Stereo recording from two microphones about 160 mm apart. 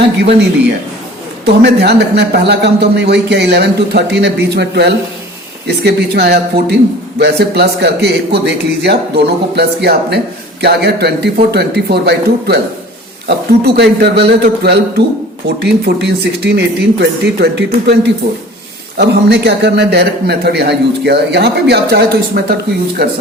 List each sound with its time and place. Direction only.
0.2 s a man's voice: 90° right
1.5 s a man's voice: 90° right